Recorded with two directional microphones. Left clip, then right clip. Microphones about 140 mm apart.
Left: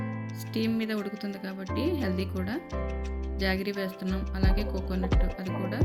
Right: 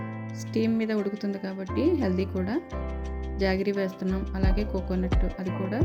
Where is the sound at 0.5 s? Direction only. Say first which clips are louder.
Right 4 dB; 15° right (ahead or behind).